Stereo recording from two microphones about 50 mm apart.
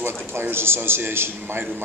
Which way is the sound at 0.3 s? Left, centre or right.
Right.